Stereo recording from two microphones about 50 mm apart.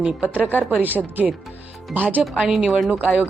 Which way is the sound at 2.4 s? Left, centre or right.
Centre.